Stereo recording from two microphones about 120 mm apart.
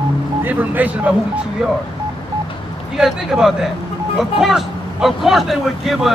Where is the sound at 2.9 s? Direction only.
5° right (ahead or behind).